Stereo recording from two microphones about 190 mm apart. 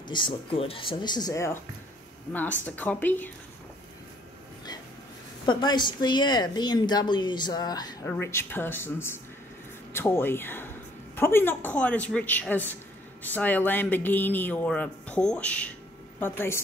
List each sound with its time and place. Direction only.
0.1 s speech: 25° left (ahead or behind)
2.6 s speech: 10° left (ahead or behind)
5.4 s speech: 25° left (ahead or behind)